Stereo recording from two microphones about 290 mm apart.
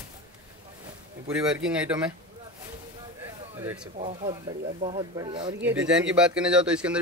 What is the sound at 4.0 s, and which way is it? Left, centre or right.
Speech, right.